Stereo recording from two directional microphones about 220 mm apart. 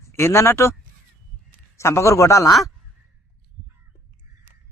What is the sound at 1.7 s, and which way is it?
Speech, 10° left (ahead or behind).